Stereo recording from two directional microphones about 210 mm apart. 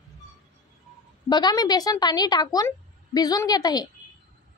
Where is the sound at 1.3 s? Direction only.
20° left (ahead or behind).